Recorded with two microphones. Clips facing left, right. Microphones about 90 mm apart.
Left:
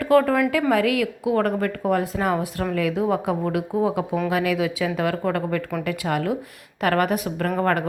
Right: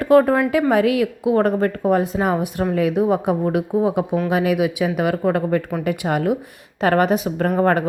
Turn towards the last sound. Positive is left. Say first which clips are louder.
# right 4 dB
turn(degrees=-25)  # may be behind; listen again after turning